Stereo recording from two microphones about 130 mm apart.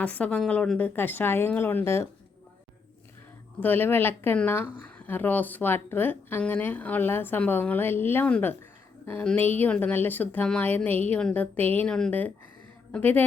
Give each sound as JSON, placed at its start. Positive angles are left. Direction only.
{"t": 0.0, "sound": "speech", "side_deg": 10}
{"t": 3.6, "sound": "speech", "side_deg": 15}